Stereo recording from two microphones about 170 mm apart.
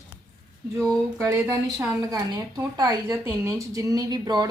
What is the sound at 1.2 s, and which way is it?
Speech, 20° right (ahead or behind).